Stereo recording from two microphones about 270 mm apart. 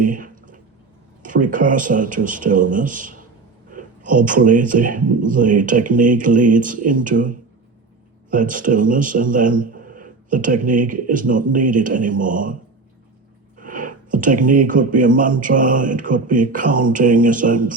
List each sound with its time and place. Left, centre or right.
0.0 s a sound: right
1.2 s a man's voice: right
13.6 s speech: right